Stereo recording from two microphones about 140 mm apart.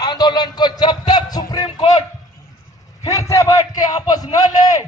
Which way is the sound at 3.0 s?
20° left (ahead or behind).